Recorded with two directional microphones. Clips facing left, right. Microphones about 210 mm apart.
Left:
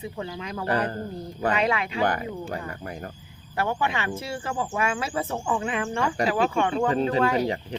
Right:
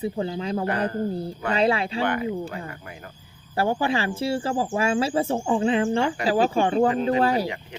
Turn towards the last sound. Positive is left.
turn(degrees=-35)  # may be behind; listen again after turning